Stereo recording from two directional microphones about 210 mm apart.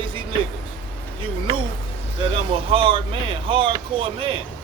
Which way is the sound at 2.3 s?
25° right (ahead or behind).